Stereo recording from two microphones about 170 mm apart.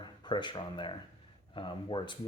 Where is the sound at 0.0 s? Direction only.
25° left (ahead or behind).